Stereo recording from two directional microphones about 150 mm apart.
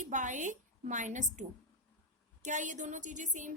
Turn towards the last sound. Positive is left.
turn(degrees=-55)  # may be behind; listen again after turning